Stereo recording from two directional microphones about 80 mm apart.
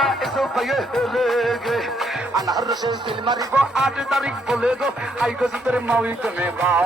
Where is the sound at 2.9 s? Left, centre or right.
Right.